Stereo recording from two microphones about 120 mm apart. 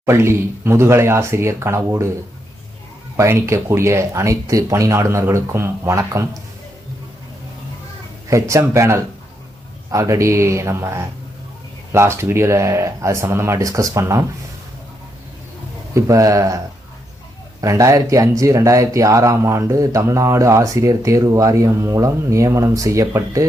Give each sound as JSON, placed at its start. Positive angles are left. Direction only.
{"t": 0.0, "sound": "speech", "side_deg": -20}
{"t": 3.2, "sound": "speech", "side_deg": -25}
{"t": 8.3, "sound": "speech", "side_deg": -25}
{"t": 16.0, "sound": "speech", "side_deg": -30}
{"t": 17.6, "sound": "speech", "side_deg": -25}